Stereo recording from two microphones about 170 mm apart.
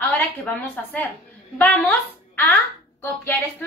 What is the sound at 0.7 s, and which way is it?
A woman's voice, 10° left (ahead or behind).